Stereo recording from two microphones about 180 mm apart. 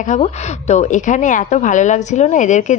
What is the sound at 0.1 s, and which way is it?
A woman's voice, 40° left (ahead or behind).